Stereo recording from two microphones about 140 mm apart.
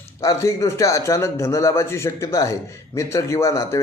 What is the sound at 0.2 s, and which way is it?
A man's voice, 20° left (ahead or behind).